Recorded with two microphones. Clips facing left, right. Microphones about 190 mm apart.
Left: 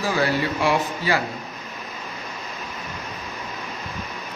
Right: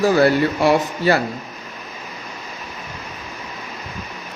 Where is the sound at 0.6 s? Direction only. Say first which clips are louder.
Right 6 dB; 45° right (ahead or behind).